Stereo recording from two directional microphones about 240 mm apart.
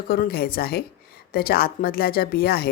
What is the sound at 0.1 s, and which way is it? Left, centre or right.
A woman's voice, left.